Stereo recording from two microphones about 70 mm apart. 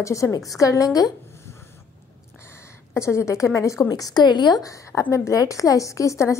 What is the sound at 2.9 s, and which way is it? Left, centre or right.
A woman's voice, left.